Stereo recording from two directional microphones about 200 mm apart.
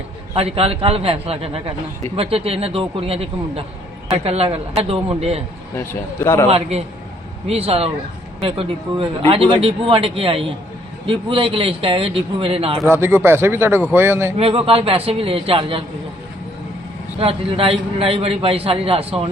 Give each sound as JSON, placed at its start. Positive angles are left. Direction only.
{"t": 0.3, "sound": "a man's voice", "side_deg": -30}
{"t": 5.7, "sound": "a man's voice", "side_deg": 10}
{"t": 6.5, "sound": "a man's voice", "side_deg": -30}
{"t": 12.8, "sound": "a man's voice", "side_deg": -10}
{"t": 14.3, "sound": "a man's voice", "side_deg": -30}
{"t": 17.2, "sound": "a man's voice", "side_deg": -30}